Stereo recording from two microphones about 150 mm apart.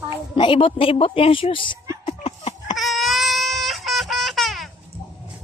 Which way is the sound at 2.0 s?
45° left (ahead or behind).